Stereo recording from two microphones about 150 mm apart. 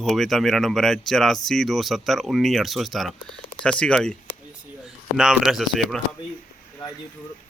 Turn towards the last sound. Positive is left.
turn(degrees=0)  # may be behind; listen again after turning